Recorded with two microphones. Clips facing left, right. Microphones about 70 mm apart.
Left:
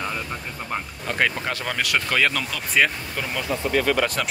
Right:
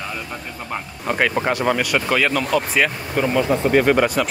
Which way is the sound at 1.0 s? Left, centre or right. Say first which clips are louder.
Right 4 dB; centre.